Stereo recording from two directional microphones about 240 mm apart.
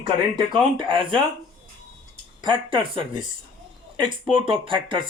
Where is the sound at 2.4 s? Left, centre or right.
Centre.